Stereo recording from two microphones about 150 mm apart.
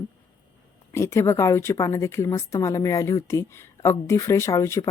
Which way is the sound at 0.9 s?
15° left (ahead or behind).